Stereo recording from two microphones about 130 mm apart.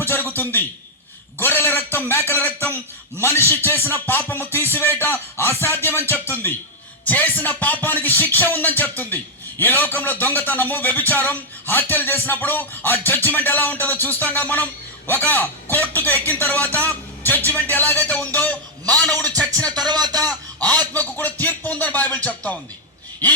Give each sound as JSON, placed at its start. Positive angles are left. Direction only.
{"t": 0.1, "sound": "a sound", "side_deg": 15}
{"t": 3.2, "sound": "a man's voice", "side_deg": 20}
{"t": 5.8, "sound": "music", "side_deg": 20}
{"t": 7.0, "sound": "a man's voice", "side_deg": 10}
{"t": 19.9, "sound": "speech", "side_deg": -30}
{"t": 20.2, "sound": "a man's voice", "side_deg": 10}